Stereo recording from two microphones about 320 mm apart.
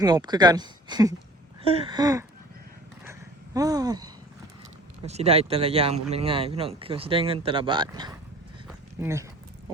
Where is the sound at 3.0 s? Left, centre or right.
Centre.